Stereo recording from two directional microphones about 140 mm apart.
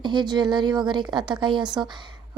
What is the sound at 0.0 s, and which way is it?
Speech, 30° right (ahead or behind).